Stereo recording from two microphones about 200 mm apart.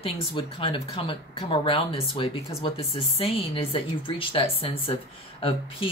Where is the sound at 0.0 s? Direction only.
25° left (ahead or behind).